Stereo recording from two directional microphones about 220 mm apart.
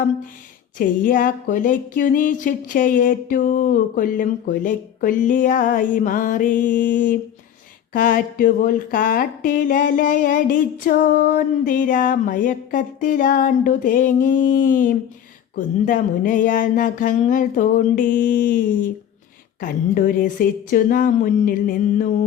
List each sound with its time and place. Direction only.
0.8 s speech: 40° left (ahead or behind)